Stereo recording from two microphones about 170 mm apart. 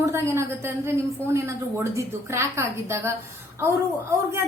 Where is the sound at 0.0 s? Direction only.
15° right (ahead or behind).